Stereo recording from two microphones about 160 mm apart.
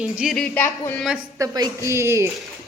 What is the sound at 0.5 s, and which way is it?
Speech, 10° left (ahead or behind).